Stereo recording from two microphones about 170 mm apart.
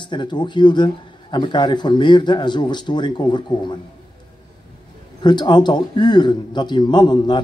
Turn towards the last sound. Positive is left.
turn(degrees=25)  # may be behind; listen again after turning